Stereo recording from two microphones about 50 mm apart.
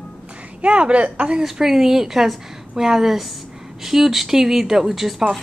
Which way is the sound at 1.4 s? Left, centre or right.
Centre.